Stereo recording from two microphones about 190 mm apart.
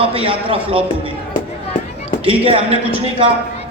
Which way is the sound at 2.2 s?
30° right (ahead or behind).